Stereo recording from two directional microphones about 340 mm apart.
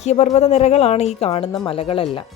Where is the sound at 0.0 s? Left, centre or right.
Centre.